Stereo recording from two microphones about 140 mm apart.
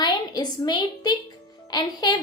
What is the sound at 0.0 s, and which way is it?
A woman's voice, 30° left (ahead or behind).